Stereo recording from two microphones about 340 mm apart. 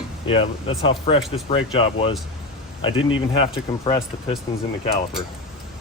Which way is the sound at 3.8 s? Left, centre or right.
Centre.